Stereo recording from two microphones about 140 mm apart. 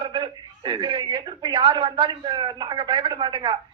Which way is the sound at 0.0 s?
30° right (ahead or behind).